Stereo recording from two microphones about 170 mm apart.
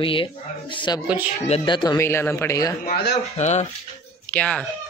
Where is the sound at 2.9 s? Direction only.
70° left (ahead or behind).